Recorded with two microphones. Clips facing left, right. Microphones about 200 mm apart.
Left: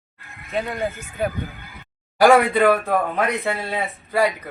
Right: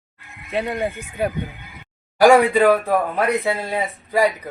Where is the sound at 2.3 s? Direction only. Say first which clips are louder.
Right 1 dB; 10° right (ahead or behind).